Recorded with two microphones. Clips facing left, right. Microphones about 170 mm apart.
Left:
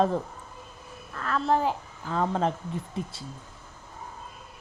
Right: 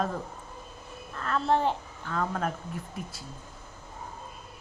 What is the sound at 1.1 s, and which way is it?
Speech, 35° right (ahead or behind).